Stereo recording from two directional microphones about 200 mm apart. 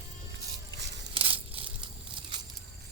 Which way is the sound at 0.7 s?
60° right (ahead or behind).